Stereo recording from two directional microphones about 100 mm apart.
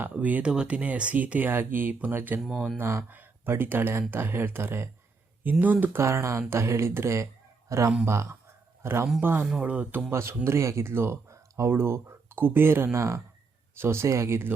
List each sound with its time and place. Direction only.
0.0 s speech: 15° right (ahead or behind)
2.4 s speech: 5° right (ahead or behind)
2.7 s a man's voice: 25° right (ahead or behind)
10.1 s speech: 25° right (ahead or behind)